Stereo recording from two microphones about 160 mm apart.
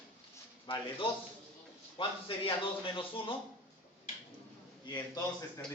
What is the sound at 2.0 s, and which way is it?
Speech, 35° left (ahead or behind).